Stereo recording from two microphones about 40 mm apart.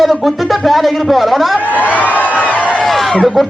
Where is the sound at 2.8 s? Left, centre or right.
Centre.